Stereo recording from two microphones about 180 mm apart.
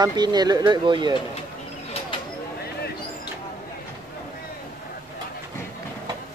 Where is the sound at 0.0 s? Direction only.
25° right (ahead or behind).